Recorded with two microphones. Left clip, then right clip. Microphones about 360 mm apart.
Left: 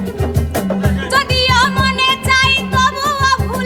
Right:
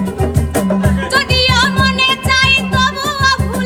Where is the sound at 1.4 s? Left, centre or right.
Left.